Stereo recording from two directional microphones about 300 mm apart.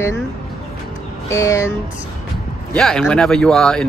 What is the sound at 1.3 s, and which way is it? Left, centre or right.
Speech, centre.